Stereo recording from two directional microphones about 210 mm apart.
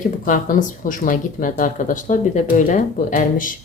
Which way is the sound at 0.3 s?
40° left (ahead or behind).